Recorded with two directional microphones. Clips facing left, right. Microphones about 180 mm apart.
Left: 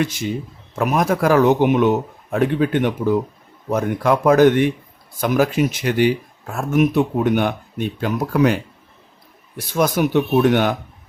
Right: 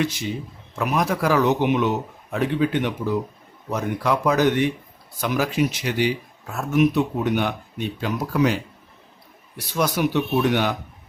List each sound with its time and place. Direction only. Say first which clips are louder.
0.0 s speech: left 3 dB; 50° left (ahead or behind)
9.6 s speech: left 4 dB; 50° left (ahead or behind)